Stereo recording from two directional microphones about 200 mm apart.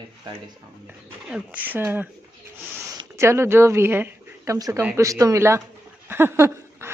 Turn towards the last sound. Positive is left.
turn(degrees=-15)  # may be behind; listen again after turning